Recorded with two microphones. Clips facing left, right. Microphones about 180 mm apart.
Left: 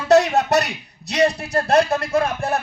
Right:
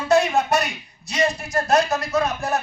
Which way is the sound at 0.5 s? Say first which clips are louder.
Left 3 dB; 65° left (ahead or behind).